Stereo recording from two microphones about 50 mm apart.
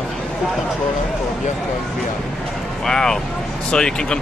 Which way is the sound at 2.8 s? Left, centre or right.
Centre.